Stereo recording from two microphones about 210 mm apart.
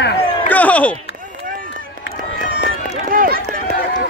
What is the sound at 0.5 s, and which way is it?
Speech, 5° left (ahead or behind).